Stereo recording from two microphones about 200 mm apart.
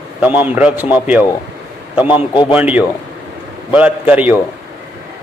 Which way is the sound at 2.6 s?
5° right (ahead or behind).